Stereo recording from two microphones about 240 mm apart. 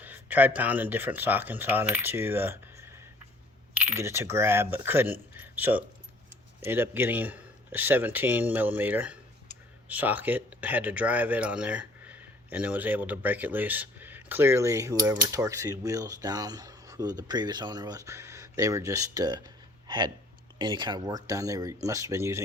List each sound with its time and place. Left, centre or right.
0.0 s speech: centre
5.4 s keys jangling: centre
6.7 s speech: centre
20.6 s speech: centre